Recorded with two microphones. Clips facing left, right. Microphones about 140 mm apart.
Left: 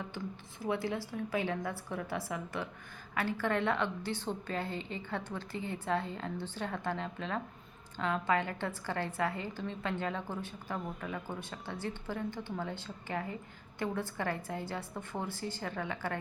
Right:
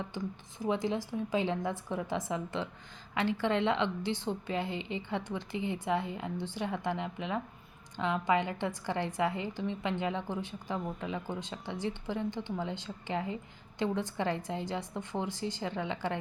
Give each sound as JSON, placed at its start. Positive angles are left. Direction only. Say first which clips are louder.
{"t": 0.6, "sound": "a woman's voice", "louder": "right 3 dB", "side_deg": -20}